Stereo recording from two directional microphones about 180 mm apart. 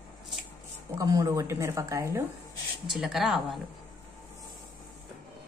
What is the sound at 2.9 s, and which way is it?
Speech, centre (ahead or behind).